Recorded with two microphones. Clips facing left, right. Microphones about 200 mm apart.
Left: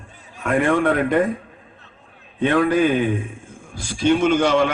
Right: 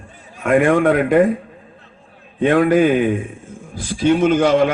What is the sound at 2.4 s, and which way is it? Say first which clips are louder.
Speech: right 4 dB; 40° right (ahead or behind).